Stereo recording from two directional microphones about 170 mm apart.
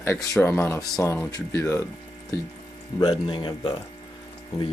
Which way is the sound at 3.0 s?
30° left (ahead or behind).